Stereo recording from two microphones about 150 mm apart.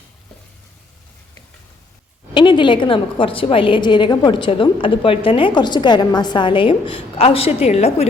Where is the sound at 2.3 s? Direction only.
30° left (ahead or behind).